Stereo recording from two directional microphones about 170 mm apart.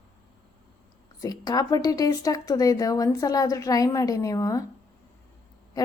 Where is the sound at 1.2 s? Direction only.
20° left (ahead or behind).